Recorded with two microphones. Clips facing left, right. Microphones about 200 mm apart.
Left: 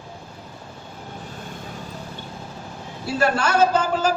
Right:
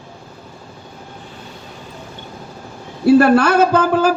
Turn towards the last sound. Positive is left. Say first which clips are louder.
# right 5 dB
turn(degrees=-60)  # may be behind; listen again after turning